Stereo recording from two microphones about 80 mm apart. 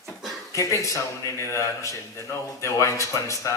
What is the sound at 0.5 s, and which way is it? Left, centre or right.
A man's voice, left.